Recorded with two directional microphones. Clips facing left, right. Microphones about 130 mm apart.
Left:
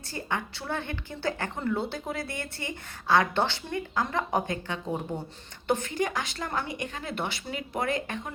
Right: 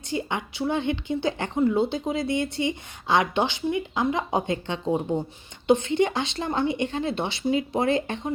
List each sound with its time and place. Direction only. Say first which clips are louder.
0.1 s a woman's voice: right 4 dB; 20° right (ahead or behind)